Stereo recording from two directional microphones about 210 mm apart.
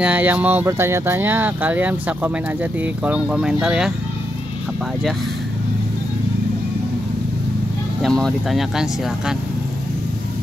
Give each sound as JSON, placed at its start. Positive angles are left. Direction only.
{"t": 0.0, "sound": "speech", "side_deg": -10}
{"t": 8.0, "sound": "speech", "side_deg": 0}